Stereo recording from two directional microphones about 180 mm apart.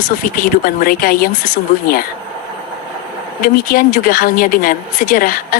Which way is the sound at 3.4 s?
55° left (ahead or behind).